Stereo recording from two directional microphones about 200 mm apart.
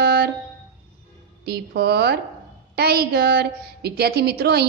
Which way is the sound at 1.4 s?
50° right (ahead or behind).